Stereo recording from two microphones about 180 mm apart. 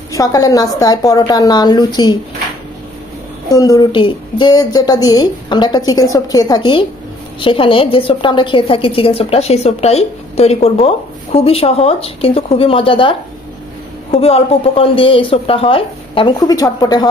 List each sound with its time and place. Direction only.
0.1 s a woman's voice: 20° left (ahead or behind)
3.4 s a woman's voice: 20° left (ahead or behind)
14.1 s a woman's voice: 30° left (ahead or behind)